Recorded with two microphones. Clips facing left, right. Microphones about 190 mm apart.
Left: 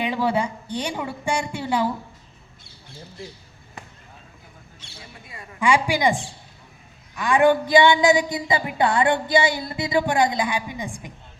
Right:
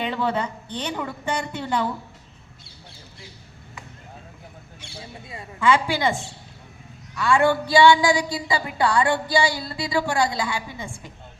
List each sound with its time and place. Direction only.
0.0 s speech: 10° left (ahead or behind)
4.8 s mouse: 10° right (ahead or behind)
5.2 s a woman's voice: 25° right (ahead or behind)
5.5 s speech: 15° left (ahead or behind)
7.2 s a woman's voice: 15° left (ahead or behind)